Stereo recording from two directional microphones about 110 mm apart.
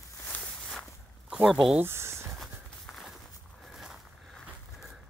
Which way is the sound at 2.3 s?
Centre (ahead or behind).